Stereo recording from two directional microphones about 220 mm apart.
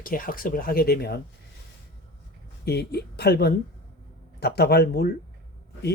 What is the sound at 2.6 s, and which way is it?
Speech, 45° left (ahead or behind).